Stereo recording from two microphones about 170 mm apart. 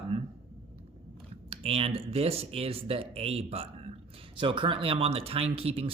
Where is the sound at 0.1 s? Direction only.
35° right (ahead or behind).